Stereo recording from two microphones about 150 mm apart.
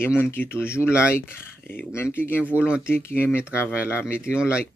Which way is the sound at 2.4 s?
10° right (ahead or behind).